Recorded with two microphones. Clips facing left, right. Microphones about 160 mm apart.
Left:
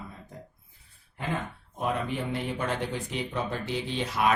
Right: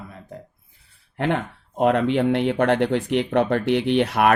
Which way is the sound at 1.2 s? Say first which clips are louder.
Right 9 dB; 75° right (ahead or behind).